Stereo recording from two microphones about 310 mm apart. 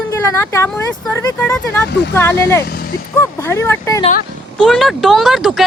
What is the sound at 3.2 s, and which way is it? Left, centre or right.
Speech, centre.